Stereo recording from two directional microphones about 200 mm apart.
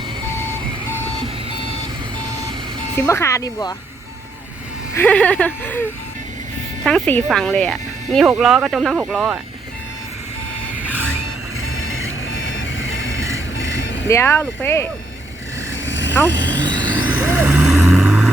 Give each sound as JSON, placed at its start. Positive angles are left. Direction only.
{"t": 3.0, "sound": "speech", "side_deg": 15}
{"t": 4.9, "sound": "speech", "side_deg": 5}
{"t": 6.8, "sound": "speech", "side_deg": 5}
{"t": 11.5, "sound": "vehicle", "side_deg": 85}
{"t": 14.1, "sound": "speech", "side_deg": 10}
{"t": 15.7, "sound": "vehicle", "side_deg": 65}
{"t": 17.3, "sound": "vehicle", "side_deg": -10}